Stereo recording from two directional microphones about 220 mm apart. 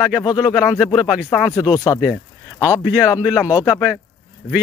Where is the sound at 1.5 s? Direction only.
15° left (ahead or behind).